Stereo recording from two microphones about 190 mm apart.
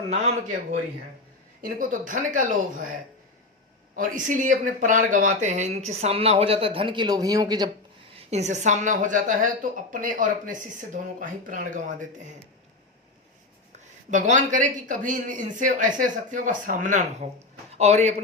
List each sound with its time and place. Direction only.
0.1 s speech: 35° right (ahead or behind)
3.9 s speech: 45° right (ahead or behind); by 7.7 s 20° right (ahead or behind)
8.1 s speech: 35° right (ahead or behind)
13.7 s a sound: 40° right (ahead or behind)
14.3 s speech: 40° right (ahead or behind)